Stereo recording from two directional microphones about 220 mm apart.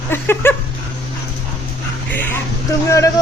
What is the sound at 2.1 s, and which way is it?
Speech, 10° left (ahead or behind).